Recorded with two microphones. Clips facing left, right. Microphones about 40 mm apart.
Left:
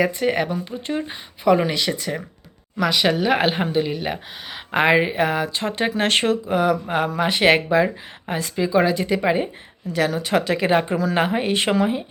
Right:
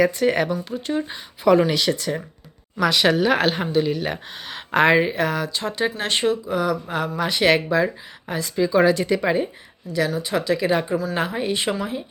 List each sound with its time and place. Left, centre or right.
0.3 s speech: centre
0.6 s speech: left
1.1 s speech: centre
3.3 s speech: centre
5.5 s speech: left
8.5 s speech: left
8.8 s speech: centre
9.9 s speech: left
11.8 s speech: left